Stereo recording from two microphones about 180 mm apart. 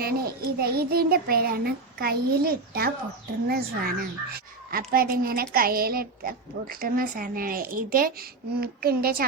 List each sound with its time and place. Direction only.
0.0 s a child's voice: 55° right (ahead or behind)